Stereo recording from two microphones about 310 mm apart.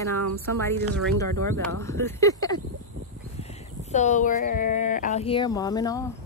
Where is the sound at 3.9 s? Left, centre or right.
Left.